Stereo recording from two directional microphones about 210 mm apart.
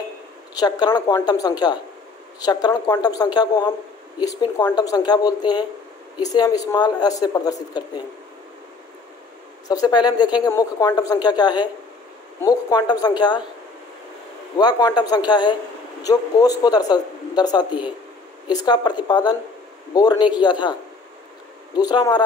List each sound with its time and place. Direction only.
0.6 s a woman's voice: 20° left (ahead or behind)
9.7 s speech: 20° left (ahead or behind)
14.6 s speech: 20° left (ahead or behind)
21.7 s speech: 20° left (ahead or behind)